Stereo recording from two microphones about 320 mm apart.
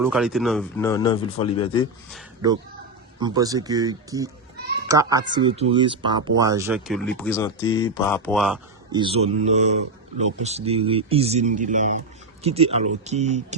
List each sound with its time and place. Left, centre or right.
0.0 s speech: centre
3.2 s speech: centre
8.9 s speech: centre